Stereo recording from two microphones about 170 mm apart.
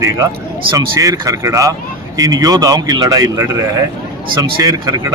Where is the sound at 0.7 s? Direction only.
25° right (ahead or behind).